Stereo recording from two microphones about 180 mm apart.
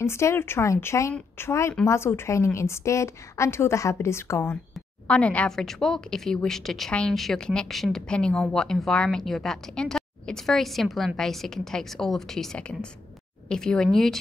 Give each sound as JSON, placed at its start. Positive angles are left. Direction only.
{"t": 0.0, "sound": "a woman's voice", "side_deg": 15}